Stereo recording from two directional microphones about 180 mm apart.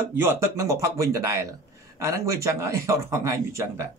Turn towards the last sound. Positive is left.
turn(degrees=-15)  # may be behind; listen again after turning